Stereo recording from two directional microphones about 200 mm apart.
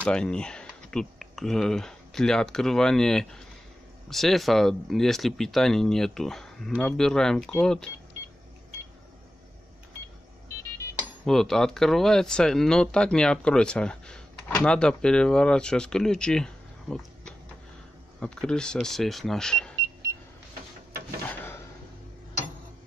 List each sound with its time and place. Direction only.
0.0 s speech: 5° left (ahead or behind)
11.2 s speech: centre (ahead or behind)
21.3 s filing: 10° left (ahead or behind)